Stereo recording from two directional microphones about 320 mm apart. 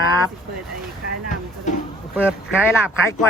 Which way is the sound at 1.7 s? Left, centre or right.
Left.